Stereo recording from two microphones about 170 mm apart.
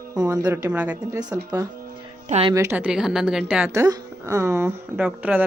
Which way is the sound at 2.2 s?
40° right (ahead or behind).